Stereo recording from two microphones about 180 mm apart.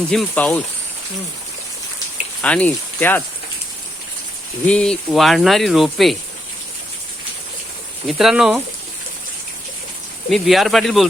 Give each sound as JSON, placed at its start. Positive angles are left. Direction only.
{"t": 0.1, "sound": "speech", "side_deg": 5}
{"t": 2.4, "sound": "speech", "side_deg": 5}
{"t": 4.6, "sound": "speech", "side_deg": 5}
{"t": 8.0, "sound": "speech", "side_deg": 0}
{"t": 10.2, "sound": "speech", "side_deg": 0}